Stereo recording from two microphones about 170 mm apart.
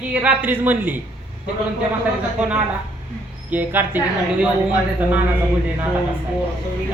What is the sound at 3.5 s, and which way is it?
Speech, 10° right (ahead or behind).